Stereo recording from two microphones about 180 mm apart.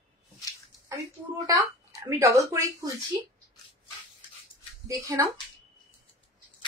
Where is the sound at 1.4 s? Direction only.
20° right (ahead or behind).